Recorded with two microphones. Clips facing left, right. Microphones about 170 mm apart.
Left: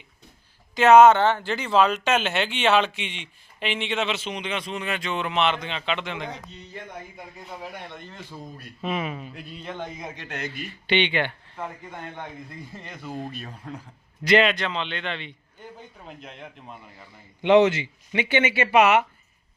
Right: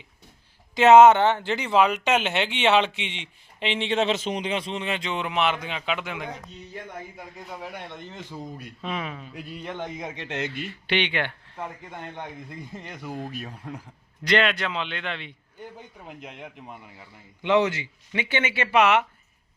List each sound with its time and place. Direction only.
0.7 s a man's voice: 20° right (ahead or behind); by 7.7 s centre (ahead or behind)
7.8 s speech: 20° right (ahead or behind)
8.8 s a man's voice: 5° left (ahead or behind)
9.3 s speech: 10° right (ahead or behind)
10.8 s speech: centre (ahead or behind)
12.1 s a man's voice: 20° right (ahead or behind)
13.1 s a man's voice: 5° left (ahead or behind)
16.0 s a man's voice: 15° right (ahead or behind)
18.1 s speech: 15° left (ahead or behind)